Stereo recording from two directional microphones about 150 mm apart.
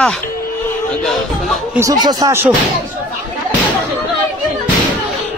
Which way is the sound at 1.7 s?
20° right (ahead or behind).